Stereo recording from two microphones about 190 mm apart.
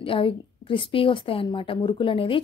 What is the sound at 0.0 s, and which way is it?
A woman's voice, 30° left (ahead or behind).